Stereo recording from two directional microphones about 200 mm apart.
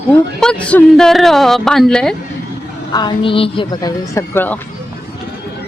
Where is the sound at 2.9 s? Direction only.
20° left (ahead or behind).